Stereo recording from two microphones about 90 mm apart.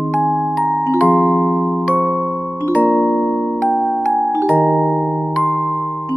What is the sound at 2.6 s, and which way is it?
Music, 15° left (ahead or behind).